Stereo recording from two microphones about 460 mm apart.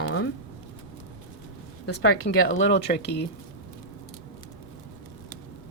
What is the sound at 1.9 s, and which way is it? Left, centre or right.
Speech, left.